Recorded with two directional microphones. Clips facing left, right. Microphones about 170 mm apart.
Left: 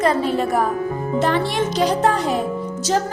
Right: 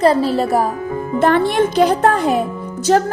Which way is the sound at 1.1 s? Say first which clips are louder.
Right 6 dB; 55° right (ahead or behind).